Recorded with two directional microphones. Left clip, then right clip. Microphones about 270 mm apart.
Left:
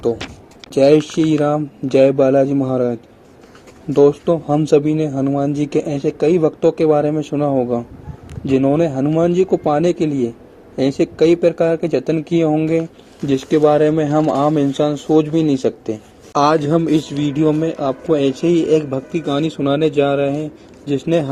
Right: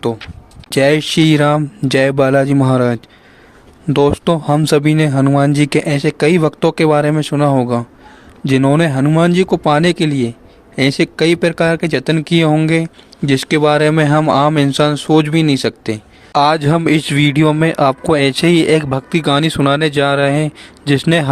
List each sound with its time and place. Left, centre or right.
0.7 s a man's voice: right
8.9 s speech: right
9.1 s speech: right
12.7 s speech: right
13.3 s speech: right
17.2 s speech: right
17.4 s speech: right